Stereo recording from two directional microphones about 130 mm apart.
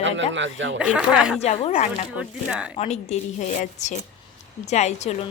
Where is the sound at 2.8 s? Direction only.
55° left (ahead or behind).